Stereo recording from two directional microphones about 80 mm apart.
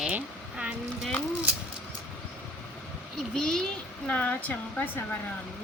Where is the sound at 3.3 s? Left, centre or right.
Centre.